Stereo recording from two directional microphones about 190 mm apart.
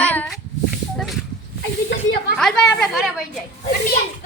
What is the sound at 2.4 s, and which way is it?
Speech, centre (ahead or behind).